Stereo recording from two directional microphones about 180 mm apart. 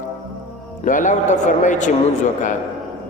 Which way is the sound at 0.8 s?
45° left (ahead or behind).